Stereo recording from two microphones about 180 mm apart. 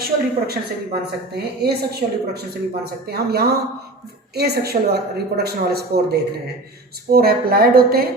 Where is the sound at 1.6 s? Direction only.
60° right (ahead or behind).